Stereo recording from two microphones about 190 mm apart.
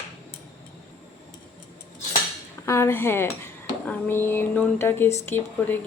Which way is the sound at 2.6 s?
15° left (ahead or behind).